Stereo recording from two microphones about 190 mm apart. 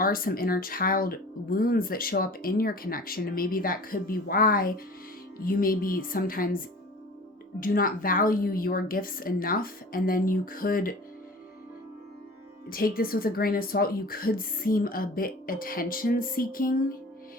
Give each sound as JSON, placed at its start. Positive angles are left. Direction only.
{"t": 0.0, "sound": "speech", "side_deg": 50}
{"t": 7.6, "sound": "speech", "side_deg": 50}
{"t": 12.6, "sound": "speech", "side_deg": 50}